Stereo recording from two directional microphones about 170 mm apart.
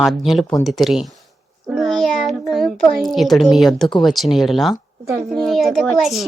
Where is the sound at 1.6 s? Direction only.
Centre (ahead or behind).